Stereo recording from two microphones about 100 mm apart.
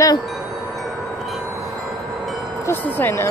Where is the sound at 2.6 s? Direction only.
20° left (ahead or behind).